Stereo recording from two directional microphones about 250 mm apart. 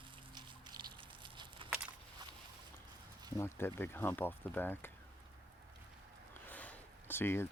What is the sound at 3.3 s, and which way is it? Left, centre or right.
Speech, centre.